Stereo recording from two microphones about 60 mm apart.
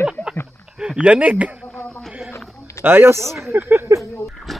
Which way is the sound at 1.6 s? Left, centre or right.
Left.